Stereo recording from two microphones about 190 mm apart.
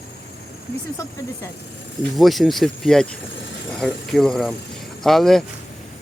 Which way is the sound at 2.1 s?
Centre (ahead or behind).